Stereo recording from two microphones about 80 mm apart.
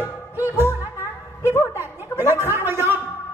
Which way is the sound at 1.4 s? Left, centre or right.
Right.